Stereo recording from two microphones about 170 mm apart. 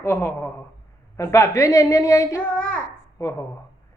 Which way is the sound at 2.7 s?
15° left (ahead or behind).